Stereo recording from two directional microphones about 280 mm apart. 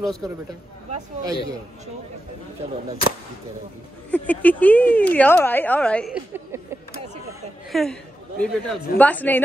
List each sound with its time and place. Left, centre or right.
0.0 s speech: centre
1.2 s speech: centre
4.1 s speech: centre
7.7 s speech: centre